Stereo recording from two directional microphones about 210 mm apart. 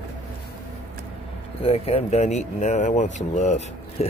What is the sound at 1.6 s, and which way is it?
Speech, 30° left (ahead or behind).